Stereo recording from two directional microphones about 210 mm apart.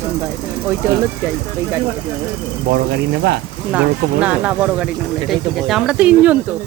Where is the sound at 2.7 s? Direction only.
50° right (ahead or behind).